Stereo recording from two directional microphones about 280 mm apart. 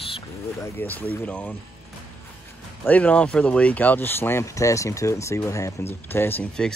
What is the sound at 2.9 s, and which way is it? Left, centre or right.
Speech, centre.